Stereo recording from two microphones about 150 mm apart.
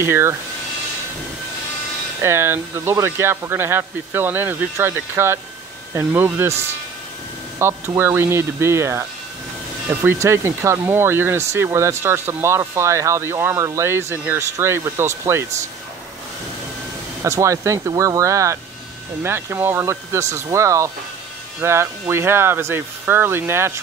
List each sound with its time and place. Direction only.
0.0 s speech: 15° right (ahead or behind)
2.2 s speech: 15° right (ahead or behind)
7.5 s speech: 15° right (ahead or behind)
17.2 s speech: 20° right (ahead or behind)